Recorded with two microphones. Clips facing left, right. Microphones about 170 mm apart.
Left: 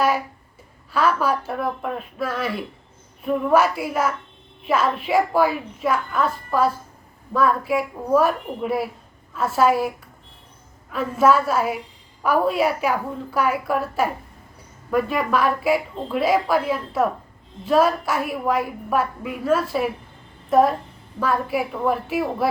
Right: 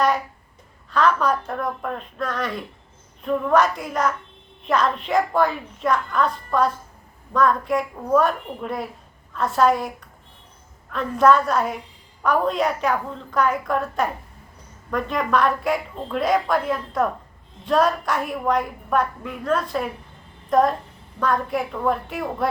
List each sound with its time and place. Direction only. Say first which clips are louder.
0.9 s a woman's voice: right 1 dB; 5° left (ahead or behind)
10.9 s a woman's voice: even; 5° left (ahead or behind)